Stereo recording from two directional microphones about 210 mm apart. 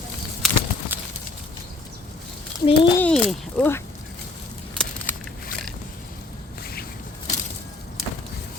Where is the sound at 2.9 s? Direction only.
5° left (ahead or behind).